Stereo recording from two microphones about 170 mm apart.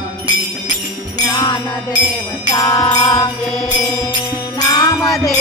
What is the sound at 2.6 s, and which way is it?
Music, 20° left (ahead or behind).